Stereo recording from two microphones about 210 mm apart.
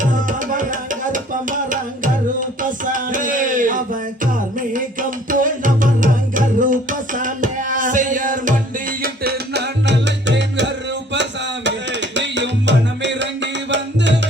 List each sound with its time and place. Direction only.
0.0 s music: 40° right (ahead or behind); by 14.2 s 55° right (ahead or behind)